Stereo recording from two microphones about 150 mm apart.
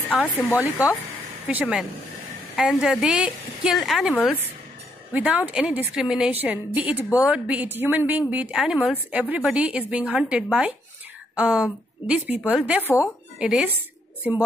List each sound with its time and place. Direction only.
0.1 s a woman's voice: centre (ahead or behind)
5.1 s a woman's voice: 10° right (ahead or behind)
12.8 s a woman's voice: 20° left (ahead or behind)
13.4 s a woman's voice: 5° right (ahead or behind)